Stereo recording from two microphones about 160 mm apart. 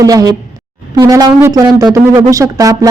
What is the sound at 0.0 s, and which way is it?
Speech, 20° right (ahead or behind).